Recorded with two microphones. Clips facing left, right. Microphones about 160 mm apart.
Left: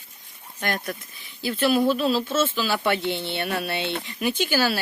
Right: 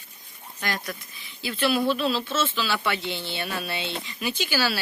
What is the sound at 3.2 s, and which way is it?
Speech, 60° left (ahead or behind).